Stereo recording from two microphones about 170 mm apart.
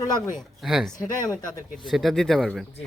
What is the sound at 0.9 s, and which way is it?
Speech, 20° left (ahead or behind).